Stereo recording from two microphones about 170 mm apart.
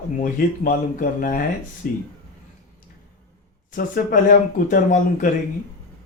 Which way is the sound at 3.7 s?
55° left (ahead or behind).